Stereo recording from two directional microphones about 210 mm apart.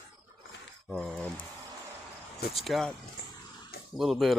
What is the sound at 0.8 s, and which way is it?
Speech, centre (ahead or behind).